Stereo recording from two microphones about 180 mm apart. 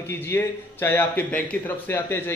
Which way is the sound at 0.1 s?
15° left (ahead or behind).